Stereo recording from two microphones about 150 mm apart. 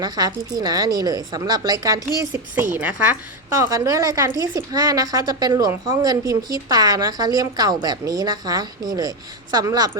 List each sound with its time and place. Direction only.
0.0 s a woman's voice: 25° right (ahead or behind)
3.6 s a woman's voice: 20° right (ahead or behind)